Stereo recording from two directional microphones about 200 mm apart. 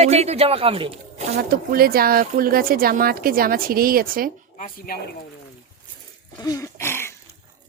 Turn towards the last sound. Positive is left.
turn(degrees=10)  # may be behind; listen again after turning